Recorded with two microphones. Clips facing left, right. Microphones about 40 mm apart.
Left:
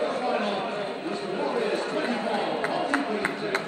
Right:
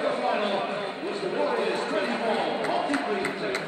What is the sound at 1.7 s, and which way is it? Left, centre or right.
Chatter, right.